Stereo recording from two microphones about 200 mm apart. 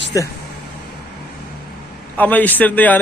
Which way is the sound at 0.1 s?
15° left (ahead or behind).